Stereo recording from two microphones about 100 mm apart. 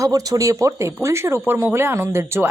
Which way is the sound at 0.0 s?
35° right (ahead or behind).